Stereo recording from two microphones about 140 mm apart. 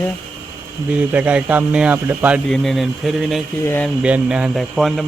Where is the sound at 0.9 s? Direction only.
10° right (ahead or behind).